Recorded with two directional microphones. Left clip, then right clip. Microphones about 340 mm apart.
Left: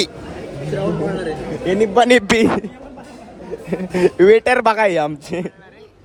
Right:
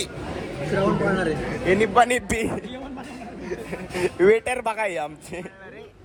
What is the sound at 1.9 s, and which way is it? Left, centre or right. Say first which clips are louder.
Speech: left 7 dB; left.